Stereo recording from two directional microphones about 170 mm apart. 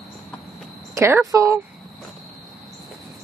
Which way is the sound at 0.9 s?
15° right (ahead or behind).